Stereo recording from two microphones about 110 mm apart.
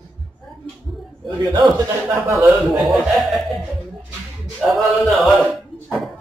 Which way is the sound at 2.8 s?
Centre (ahead or behind).